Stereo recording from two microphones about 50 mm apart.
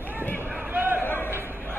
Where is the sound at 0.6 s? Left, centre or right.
Right.